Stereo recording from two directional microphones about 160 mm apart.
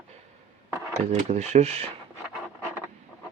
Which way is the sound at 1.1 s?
45° right (ahead or behind).